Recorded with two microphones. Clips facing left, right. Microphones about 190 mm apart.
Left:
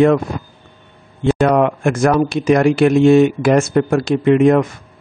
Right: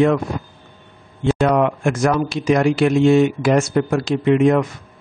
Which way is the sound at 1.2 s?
55° left (ahead or behind).